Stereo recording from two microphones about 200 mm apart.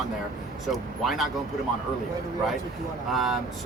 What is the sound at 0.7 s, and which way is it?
Speech, centre (ahead or behind).